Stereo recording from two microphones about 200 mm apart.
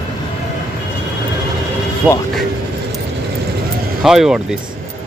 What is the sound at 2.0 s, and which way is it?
Speech, 5° right (ahead or behind).